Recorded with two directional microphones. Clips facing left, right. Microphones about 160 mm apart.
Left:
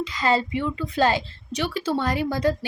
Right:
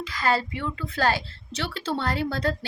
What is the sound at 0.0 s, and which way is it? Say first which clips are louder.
Speech: left 3 dB; 20° left (ahead or behind).